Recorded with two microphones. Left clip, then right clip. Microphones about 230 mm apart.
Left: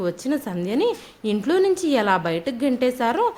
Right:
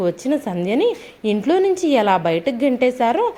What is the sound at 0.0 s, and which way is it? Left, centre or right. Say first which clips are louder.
A woman's voice: right 5 dB; centre.